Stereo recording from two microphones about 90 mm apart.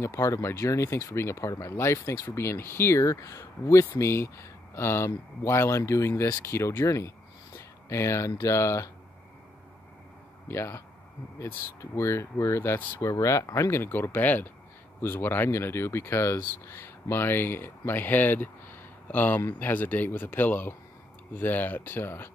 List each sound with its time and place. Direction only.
0.0 s speech: 35° left (ahead or behind)
7.5 s a sound: 30° left (ahead or behind)
8.3 s speech: 35° left (ahead or behind)
10.5 s speech: 30° left (ahead or behind)